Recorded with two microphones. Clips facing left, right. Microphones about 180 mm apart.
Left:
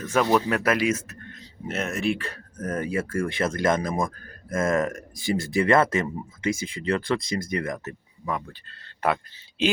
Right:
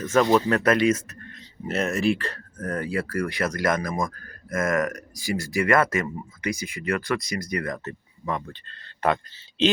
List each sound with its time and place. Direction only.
0.1 s speech: 5° left (ahead or behind)
2.6 s speech: 20° left (ahead or behind)
8.2 s speech: 5° left (ahead or behind)